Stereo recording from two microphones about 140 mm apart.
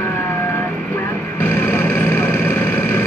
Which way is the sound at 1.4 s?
15° left (ahead or behind).